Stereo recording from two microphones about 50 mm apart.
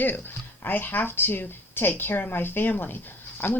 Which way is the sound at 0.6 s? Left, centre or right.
Left.